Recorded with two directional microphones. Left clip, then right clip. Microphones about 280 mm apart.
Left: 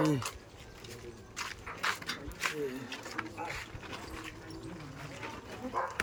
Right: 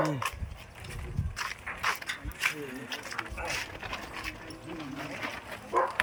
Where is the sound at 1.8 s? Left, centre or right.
Right.